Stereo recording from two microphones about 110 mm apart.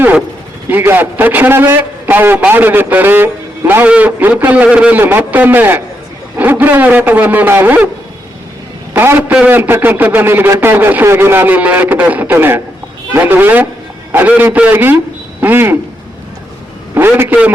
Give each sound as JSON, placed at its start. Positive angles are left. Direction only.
{"t": 0.7, "sound": "a man's voice", "side_deg": -20}
{"t": 8.9, "sound": "a man's voice", "side_deg": -20}
{"t": 16.9, "sound": "a man's voice", "side_deg": -20}